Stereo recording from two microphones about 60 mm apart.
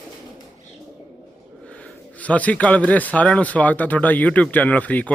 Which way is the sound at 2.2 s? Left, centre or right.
Left.